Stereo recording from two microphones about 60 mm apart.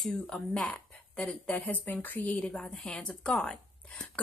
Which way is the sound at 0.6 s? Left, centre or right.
Centre.